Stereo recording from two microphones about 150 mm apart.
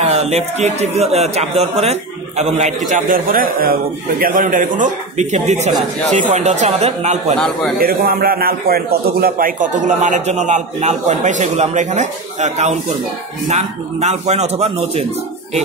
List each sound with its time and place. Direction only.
0.0 s a man's voice: 45° right (ahead or behind)
7.3 s a man's voice: 5° left (ahead or behind)
7.8 s a man's voice: 75° right (ahead or behind); by 15.0 s 45° right (ahead or behind)